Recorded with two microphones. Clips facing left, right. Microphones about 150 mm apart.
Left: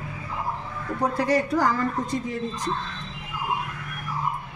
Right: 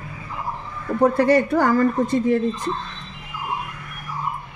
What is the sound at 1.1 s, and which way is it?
A woman's voice, 60° right (ahead or behind).